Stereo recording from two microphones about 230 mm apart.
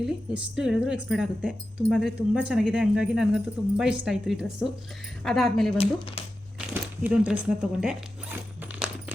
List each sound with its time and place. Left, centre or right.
0.0 s speech: centre
5.7 s speech: left
6.6 s speech: centre
8.8 s coin: centre